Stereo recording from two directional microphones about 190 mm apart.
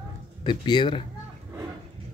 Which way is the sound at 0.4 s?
25° left (ahead or behind).